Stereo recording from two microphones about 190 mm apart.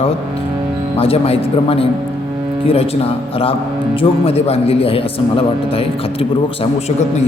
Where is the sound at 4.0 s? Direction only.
30° left (ahead or behind).